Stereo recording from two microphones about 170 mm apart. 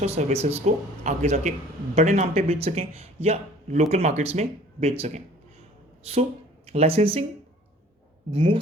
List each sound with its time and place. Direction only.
0.0 s a man's voice: 40° right (ahead or behind)
6.7 s a man's voice: 35° right (ahead or behind)
8.3 s a man's voice: 30° right (ahead or behind)